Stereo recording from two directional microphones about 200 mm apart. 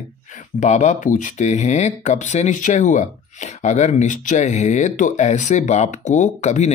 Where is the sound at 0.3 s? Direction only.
35° left (ahead or behind).